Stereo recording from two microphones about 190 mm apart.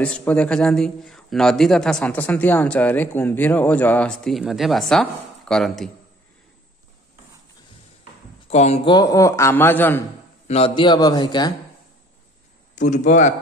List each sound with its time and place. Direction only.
0.0 s a man's voice: 5° left (ahead or behind)
8.5 s a man's voice: 35° left (ahead or behind); by 10.0 s 10° left (ahead or behind)
10.5 s a man's voice: 30° left (ahead or behind)
12.7 s speech: 40° left (ahead or behind)